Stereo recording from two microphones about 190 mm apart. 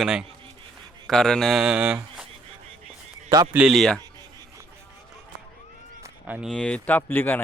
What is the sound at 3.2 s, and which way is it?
Speech, 20° right (ahead or behind).